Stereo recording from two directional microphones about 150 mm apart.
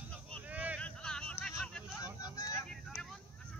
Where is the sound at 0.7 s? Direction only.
5° left (ahead or behind).